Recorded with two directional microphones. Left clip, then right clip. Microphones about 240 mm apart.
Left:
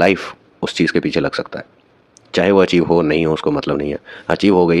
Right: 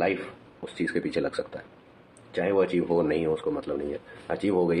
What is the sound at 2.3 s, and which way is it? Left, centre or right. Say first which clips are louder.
Speech: left 12 dB; left.